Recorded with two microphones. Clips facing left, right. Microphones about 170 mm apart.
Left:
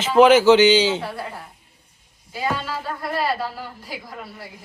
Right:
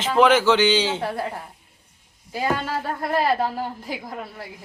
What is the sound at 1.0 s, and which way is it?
Speech, 45° right (ahead or behind).